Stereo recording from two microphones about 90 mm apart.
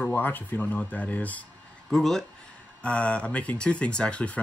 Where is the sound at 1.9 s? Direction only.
5° left (ahead or behind).